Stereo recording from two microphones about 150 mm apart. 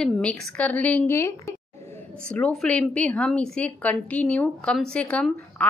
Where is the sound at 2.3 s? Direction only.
10° left (ahead or behind).